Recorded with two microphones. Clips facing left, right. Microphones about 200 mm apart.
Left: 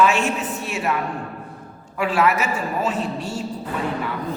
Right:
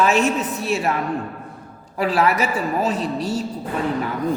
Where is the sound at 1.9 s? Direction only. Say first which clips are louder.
Right 1 dB; 35° right (ahead or behind).